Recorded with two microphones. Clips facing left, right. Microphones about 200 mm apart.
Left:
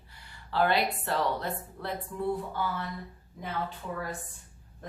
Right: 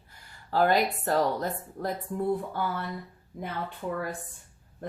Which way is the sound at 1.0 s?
40° right (ahead or behind).